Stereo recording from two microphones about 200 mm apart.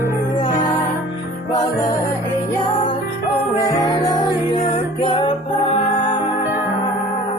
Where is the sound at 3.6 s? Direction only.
20° left (ahead or behind).